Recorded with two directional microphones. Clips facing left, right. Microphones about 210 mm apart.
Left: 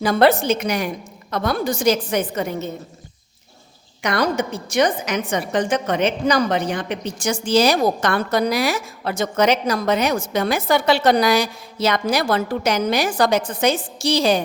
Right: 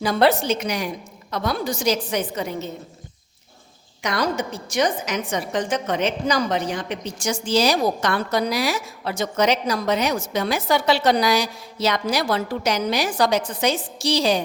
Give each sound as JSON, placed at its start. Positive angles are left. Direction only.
{"t": 0.0, "sound": "a woman's voice", "side_deg": 50}
{"t": 4.0, "sound": "a woman's voice", "side_deg": 60}